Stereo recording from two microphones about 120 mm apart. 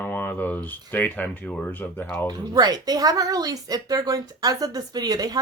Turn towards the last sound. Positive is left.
turn(degrees=-35)  # may be behind; listen again after turning